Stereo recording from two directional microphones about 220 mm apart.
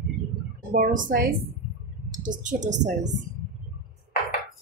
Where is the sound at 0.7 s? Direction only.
35° right (ahead or behind).